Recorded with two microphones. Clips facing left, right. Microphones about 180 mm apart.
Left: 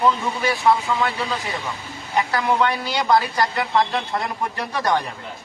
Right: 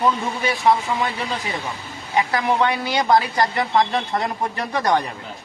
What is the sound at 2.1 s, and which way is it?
A man's voice, 20° right (ahead or behind).